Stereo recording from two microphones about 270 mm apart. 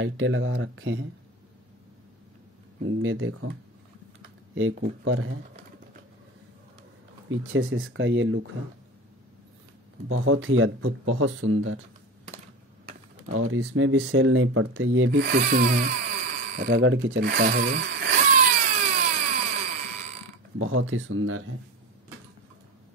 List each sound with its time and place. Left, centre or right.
0.0 s speech: right
3.0 s speech: right
4.6 s speech: right
7.2 s speech: right
10.0 s speech: right
13.3 s speech: right
16.7 s a sound: right
20.5 s speech: right